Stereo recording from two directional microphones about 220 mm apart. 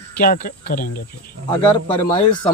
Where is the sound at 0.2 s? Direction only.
40° left (ahead or behind).